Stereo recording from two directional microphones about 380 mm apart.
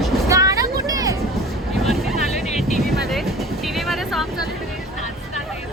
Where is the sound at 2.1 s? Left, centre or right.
Centre.